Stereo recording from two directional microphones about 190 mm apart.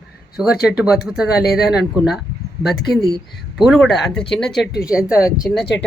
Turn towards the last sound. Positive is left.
turn(degrees=0)  # may be behind; listen again after turning